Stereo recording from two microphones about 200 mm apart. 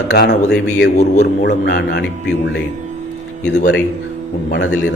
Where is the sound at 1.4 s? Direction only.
55° left (ahead or behind).